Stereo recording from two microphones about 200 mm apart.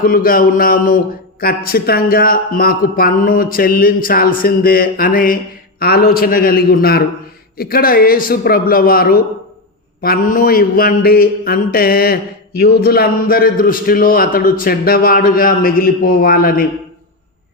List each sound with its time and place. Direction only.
0.0 s mantra: 45° left (ahead or behind)